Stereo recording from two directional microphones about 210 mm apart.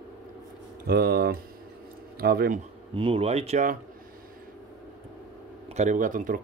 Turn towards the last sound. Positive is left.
turn(degrees=-40)  # may be behind; listen again after turning